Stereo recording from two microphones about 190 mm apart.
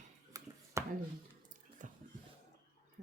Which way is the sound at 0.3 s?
15° right (ahead or behind).